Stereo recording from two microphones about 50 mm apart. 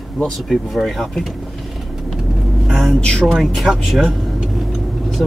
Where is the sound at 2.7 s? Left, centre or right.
Centre.